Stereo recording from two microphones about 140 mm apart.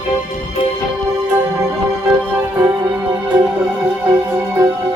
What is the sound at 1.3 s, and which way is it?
Music, 25° right (ahead or behind).